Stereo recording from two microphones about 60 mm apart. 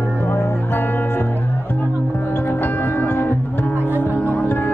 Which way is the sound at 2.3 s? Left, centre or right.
Left.